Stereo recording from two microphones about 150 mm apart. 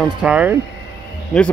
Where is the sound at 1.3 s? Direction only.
5° left (ahead or behind).